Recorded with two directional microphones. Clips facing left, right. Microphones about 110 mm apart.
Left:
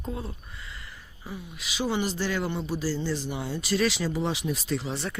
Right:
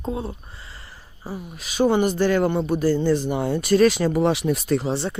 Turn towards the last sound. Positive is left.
turn(degrees=-30)  # may be behind; listen again after turning